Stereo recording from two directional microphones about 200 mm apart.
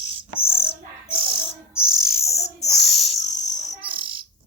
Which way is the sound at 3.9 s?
25° right (ahead or behind).